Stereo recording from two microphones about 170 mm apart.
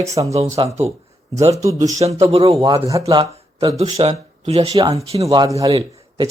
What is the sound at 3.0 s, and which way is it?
Speech, 35° right (ahead or behind).